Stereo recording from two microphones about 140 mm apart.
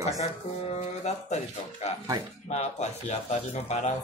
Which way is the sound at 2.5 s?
55° left (ahead or behind).